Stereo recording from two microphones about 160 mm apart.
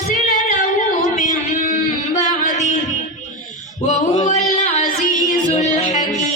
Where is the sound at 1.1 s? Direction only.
50° left (ahead or behind).